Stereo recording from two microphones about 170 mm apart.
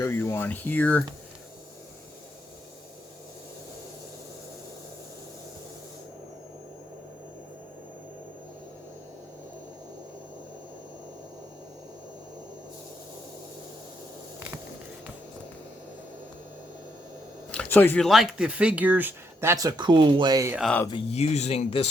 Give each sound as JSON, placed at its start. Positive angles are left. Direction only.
{"t": 0.0, "sound": "speech", "side_deg": 15}
{"t": 17.5, "sound": "speech", "side_deg": 10}
{"t": 21.1, "sound": "speech", "side_deg": 40}